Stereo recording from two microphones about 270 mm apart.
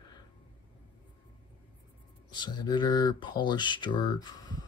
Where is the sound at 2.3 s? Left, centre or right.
Centre.